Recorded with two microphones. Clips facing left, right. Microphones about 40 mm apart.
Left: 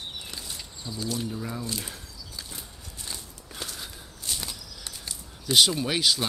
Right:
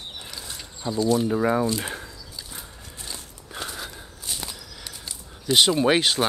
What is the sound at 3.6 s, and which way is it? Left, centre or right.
Walk, right.